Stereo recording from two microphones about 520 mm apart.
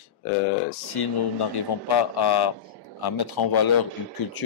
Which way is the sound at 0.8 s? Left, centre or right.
Left.